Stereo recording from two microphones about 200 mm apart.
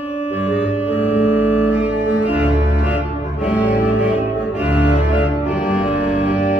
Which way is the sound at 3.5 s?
5° right (ahead or behind).